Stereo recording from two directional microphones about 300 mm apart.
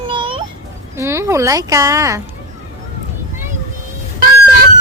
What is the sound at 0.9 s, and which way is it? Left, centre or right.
Speech, centre.